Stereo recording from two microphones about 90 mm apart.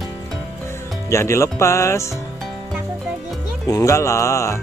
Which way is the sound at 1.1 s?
30° left (ahead or behind).